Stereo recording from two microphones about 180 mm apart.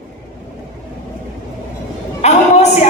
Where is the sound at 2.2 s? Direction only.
40° left (ahead or behind).